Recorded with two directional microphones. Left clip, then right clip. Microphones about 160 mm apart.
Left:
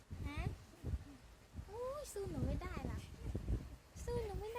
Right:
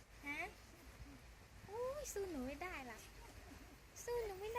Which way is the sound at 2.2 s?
5° right (ahead or behind).